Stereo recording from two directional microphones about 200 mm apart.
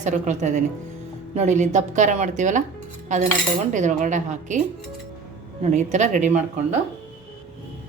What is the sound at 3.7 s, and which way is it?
Speech, 40° right (ahead or behind).